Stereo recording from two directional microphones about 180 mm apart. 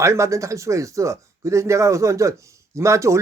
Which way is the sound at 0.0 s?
15° right (ahead or behind).